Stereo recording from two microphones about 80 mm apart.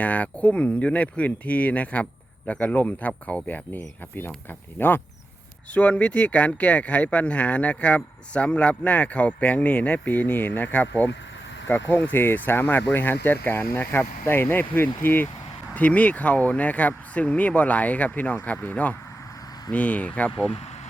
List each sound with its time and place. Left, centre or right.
0.0 s speech: centre
5.7 s speech: centre